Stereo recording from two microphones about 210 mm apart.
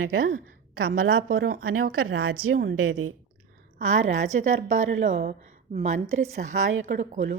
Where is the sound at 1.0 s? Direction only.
75° right (ahead or behind).